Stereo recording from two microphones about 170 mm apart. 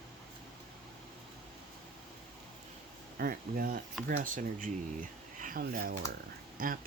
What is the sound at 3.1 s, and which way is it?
Speech, 60° right (ahead or behind).